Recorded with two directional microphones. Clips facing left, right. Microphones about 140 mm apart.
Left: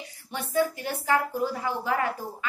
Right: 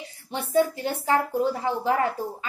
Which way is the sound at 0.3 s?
30° right (ahead or behind).